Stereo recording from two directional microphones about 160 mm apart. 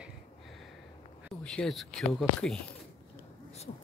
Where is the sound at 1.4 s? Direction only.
5° left (ahead or behind).